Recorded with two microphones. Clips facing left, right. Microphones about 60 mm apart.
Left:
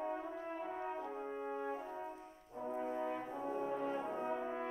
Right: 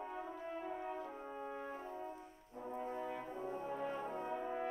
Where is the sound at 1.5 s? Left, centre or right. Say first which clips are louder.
Left 4 dB; centre.